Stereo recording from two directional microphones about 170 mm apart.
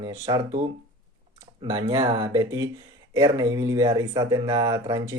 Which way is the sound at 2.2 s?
15° right (ahead or behind).